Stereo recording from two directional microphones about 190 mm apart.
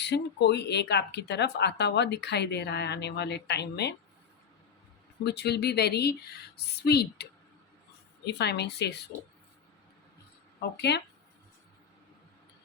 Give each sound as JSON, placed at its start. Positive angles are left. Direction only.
{"t": 0.0, "sound": "speech", "side_deg": 65}
{"t": 5.2, "sound": "speech", "side_deg": 60}
{"t": 10.8, "sound": "speech", "side_deg": 60}